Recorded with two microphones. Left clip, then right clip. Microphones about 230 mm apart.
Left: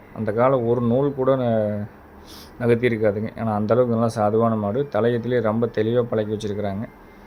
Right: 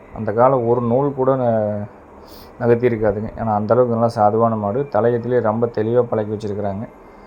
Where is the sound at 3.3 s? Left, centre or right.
Centre.